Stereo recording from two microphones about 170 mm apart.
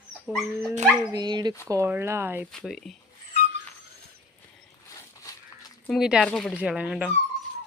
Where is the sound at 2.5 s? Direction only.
Centre (ahead or behind).